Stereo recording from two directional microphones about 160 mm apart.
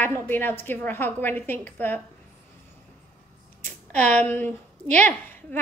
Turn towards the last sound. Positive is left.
turn(degrees=10)  # may be behind; listen again after turning